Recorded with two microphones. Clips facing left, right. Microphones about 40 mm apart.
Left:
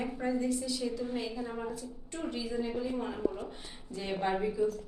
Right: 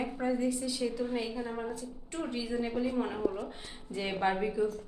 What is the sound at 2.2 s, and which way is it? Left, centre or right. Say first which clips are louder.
Speech: right 1 dB; centre.